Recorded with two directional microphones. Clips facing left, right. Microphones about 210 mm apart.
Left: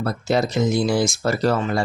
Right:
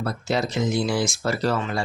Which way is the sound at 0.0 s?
40° left (ahead or behind).